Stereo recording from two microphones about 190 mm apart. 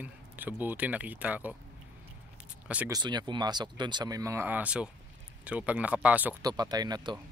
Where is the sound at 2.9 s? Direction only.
20° right (ahead or behind).